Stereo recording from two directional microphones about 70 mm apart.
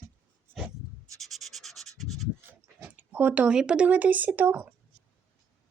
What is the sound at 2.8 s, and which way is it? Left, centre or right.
Speech, right.